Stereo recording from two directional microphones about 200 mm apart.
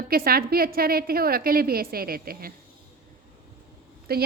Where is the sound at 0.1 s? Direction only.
50° right (ahead or behind).